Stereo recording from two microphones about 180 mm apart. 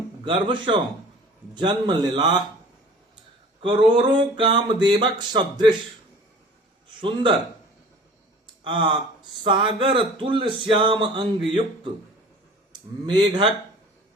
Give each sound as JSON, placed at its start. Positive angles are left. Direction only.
{"t": 0.3, "sound": "speech", "side_deg": -25}
{"t": 3.6, "sound": "speech", "side_deg": -25}
{"t": 7.0, "sound": "speech", "side_deg": -25}
{"t": 8.6, "sound": "speech", "side_deg": -25}
{"t": 13.1, "sound": "speech", "side_deg": -25}